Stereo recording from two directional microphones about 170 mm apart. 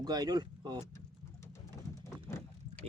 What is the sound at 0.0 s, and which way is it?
Speech, 25° right (ahead or behind).